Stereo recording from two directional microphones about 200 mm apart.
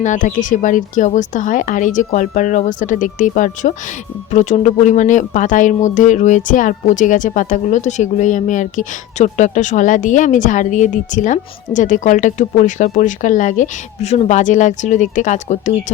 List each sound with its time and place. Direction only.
0.0 s speech: 40° left (ahead or behind)